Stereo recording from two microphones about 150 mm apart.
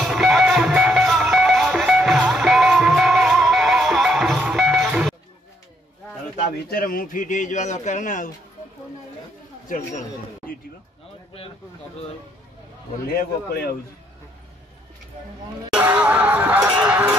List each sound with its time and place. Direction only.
0.0 s music: centre (ahead or behind)
6.7 s speech: 70° left (ahead or behind); by 8.3 s 55° left (ahead or behind)
9.7 s speech: 60° left (ahead or behind)
13.0 s a man's voice: 85° left
15.7 s music: 10° right (ahead or behind)
16.8 s a sound: 10° right (ahead or behind)